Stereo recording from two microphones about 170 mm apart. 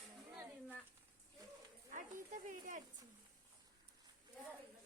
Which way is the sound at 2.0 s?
50° right (ahead or behind).